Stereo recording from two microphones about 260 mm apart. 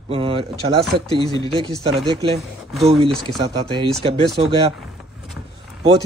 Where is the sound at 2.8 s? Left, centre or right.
Right.